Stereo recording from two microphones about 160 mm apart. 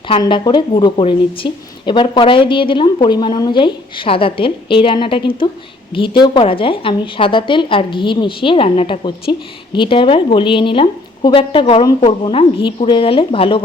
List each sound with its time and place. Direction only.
0.1 s speech: 30° left (ahead or behind)